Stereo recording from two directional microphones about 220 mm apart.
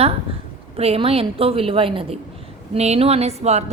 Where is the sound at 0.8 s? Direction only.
25° right (ahead or behind).